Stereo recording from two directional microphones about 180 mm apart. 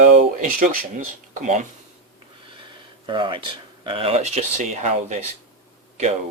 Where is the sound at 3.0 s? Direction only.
25° right (ahead or behind); by 5.2 s 45° right (ahead or behind).